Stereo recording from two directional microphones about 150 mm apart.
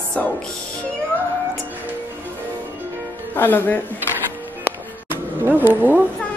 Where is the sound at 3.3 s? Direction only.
15° left (ahead or behind).